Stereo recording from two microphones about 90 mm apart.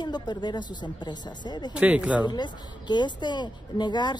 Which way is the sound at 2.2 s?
55° left (ahead or behind).